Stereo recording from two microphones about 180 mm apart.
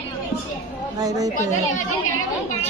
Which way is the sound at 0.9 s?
20° right (ahead or behind).